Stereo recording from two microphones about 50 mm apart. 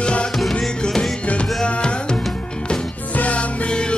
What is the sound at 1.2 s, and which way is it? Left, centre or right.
Music, left.